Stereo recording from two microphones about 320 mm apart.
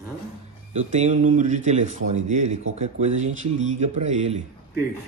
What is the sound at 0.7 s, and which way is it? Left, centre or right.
A man's voice, right.